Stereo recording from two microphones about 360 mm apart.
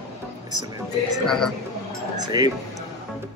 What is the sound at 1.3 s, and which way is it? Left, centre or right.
Speech, centre.